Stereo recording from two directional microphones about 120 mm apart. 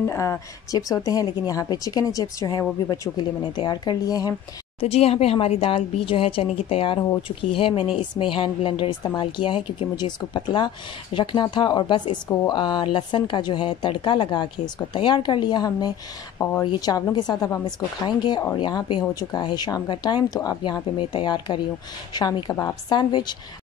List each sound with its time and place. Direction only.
0.0 s a woman's voice: 20° left (ahead or behind)
4.7 s a woman's voice: 55° left (ahead or behind); by 23.3 s 35° left (ahead or behind)